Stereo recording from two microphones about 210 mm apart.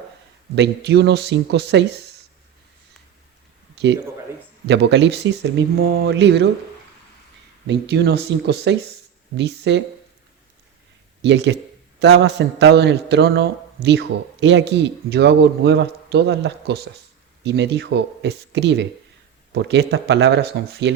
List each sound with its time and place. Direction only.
0.5 s speech: 55° right (ahead or behind)
3.8 s speech: 55° right (ahead or behind)
7.7 s speech: 55° right (ahead or behind)
11.2 s speech: 55° right (ahead or behind)